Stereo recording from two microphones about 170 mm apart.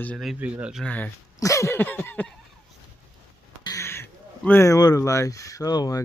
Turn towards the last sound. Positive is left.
turn(degrees=20)  # may be behind; listen again after turning